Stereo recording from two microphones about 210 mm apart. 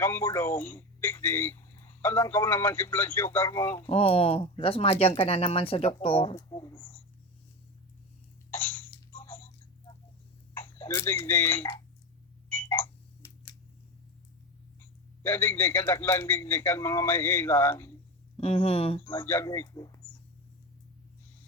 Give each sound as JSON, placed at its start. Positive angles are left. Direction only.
{"t": 0.0, "sound": "speech", "side_deg": 10}
{"t": 3.8, "sound": "speech", "side_deg": 25}
{"t": 8.5, "sound": "a sound", "side_deg": 10}
{"t": 10.5, "sound": "speech", "side_deg": 10}
{"t": 12.5, "sound": "clock", "side_deg": 10}
{"t": 15.2, "sound": "speech", "side_deg": 10}
{"t": 18.3, "sound": "speech", "side_deg": 25}
{"t": 19.1, "sound": "speech", "side_deg": 10}